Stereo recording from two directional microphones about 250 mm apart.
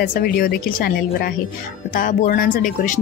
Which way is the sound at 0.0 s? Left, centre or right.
Left.